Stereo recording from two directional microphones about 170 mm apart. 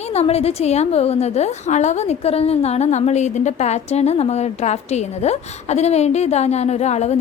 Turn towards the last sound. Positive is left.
turn(degrees=40)  # may be behind; listen again after turning